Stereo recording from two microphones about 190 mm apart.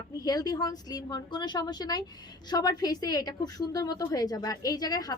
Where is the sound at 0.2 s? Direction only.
20° left (ahead or behind).